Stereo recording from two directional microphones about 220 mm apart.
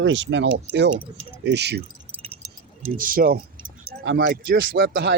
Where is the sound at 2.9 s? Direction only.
40° right (ahead or behind).